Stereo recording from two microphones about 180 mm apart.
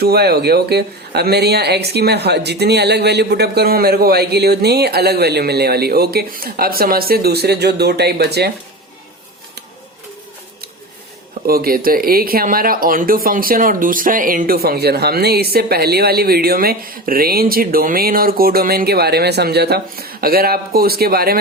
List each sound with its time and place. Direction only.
0.0 s speech: 60° right (ahead or behind)
11.4 s speech: 55° right (ahead or behind)